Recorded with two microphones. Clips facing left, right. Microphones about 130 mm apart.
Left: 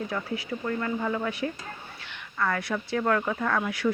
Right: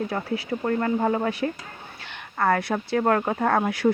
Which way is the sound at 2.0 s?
50° right (ahead or behind).